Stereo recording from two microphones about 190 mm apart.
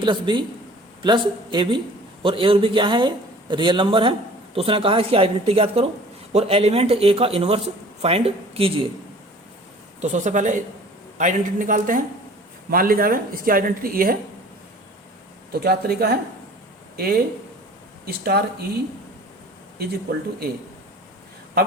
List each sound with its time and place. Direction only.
0.0 s speech: 25° right (ahead or behind)
10.0 s speech: 40° right (ahead or behind)
15.5 s speech: 55° right (ahead or behind)
19.8 s speech: 55° right (ahead or behind)